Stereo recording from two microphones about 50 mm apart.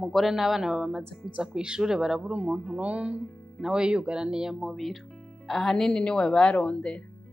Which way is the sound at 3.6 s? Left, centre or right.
Centre.